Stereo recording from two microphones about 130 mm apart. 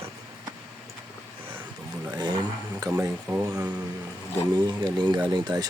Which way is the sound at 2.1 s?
35° right (ahead or behind).